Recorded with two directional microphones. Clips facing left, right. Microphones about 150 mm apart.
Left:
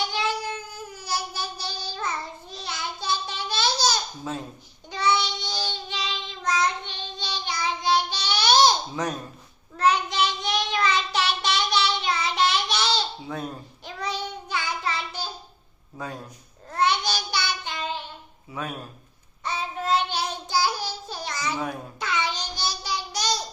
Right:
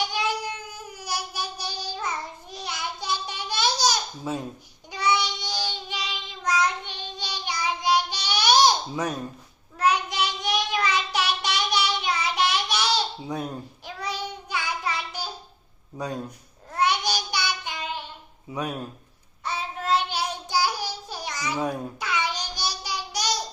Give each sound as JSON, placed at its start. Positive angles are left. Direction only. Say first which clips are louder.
{"t": 0.1, "sound": "music", "louder": "even", "side_deg": -15}
{"t": 2.5, "sound": "babbling", "louder": "right 1 dB", "side_deg": -15}
{"t": 4.9, "sound": "child singing", "louder": "left 1 dB", "side_deg": -10}
{"t": 16.7, "sound": "child singing", "louder": "even", "side_deg": -10}
{"t": 18.6, "sound": "speech", "louder": "right 3 dB", "side_deg": -15}
{"t": 19.5, "sound": "child singing", "louder": "even", "side_deg": -5}